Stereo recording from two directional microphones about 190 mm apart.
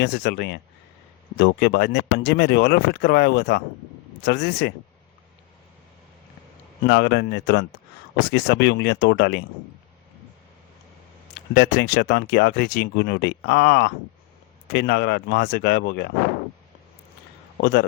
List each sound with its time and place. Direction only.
0.0 s speech: 60° left (ahead or behind)
6.8 s speech: 60° left (ahead or behind)
11.5 s speech: 60° left (ahead or behind)
17.6 s speech: 65° left (ahead or behind)